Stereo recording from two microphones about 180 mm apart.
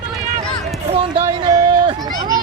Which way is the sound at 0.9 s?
30° right (ahead or behind).